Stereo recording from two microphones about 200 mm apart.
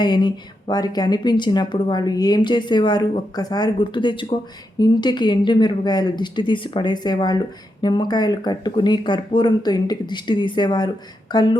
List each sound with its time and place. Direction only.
0.0 s speech: 25° left (ahead or behind)